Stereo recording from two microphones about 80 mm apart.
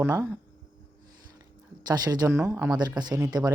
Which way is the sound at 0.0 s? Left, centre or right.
Right.